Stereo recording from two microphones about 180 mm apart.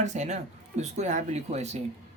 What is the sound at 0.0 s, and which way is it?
Speech, 40° right (ahead or behind).